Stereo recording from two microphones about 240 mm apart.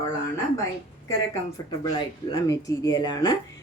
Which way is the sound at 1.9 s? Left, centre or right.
Centre.